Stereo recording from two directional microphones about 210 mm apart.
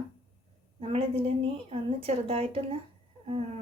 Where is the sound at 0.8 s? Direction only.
30° right (ahead or behind).